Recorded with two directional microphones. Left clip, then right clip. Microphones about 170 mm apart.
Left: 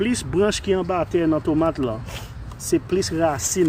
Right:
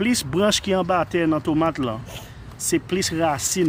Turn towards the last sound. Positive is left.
turn(degrees=-55)  # may be behind; listen again after turning